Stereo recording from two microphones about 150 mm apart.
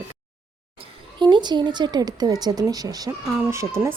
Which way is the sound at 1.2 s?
30° right (ahead or behind).